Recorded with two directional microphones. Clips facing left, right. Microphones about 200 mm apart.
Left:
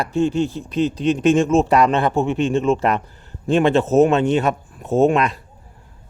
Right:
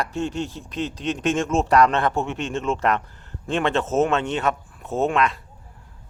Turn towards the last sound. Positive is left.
turn(degrees=15)  # may be behind; listen again after turning